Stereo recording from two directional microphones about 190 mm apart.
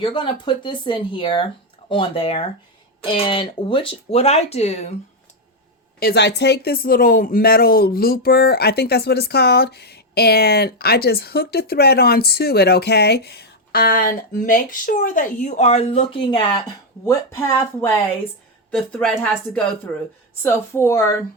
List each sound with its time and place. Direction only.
0.0 s speech: 25° left (ahead or behind)
6.0 s speech: 60° left (ahead or behind); by 17.9 s 15° left (ahead or behind)
18.7 s a woman's voice: 5° left (ahead or behind)
20.4 s speech: 15° left (ahead or behind)